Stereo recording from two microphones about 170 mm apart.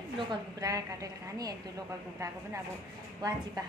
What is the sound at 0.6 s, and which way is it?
Speech, 20° right (ahead or behind).